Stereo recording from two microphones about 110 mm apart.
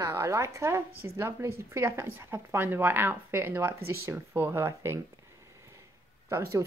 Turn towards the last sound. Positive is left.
turn(degrees=-25)  # may be behind; listen again after turning